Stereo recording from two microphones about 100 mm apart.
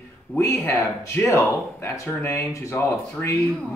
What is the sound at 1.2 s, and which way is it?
Speech, 30° left (ahead or behind).